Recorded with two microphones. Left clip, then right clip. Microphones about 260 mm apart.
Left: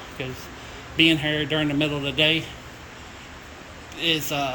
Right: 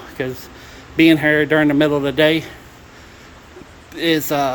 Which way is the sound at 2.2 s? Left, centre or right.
Centre.